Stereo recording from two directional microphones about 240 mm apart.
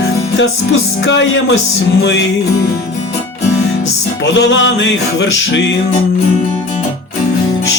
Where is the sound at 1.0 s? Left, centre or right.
Left.